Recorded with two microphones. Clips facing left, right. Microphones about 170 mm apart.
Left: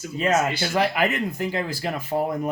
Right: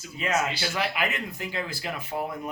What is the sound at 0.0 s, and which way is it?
Speech, 50° left (ahead or behind).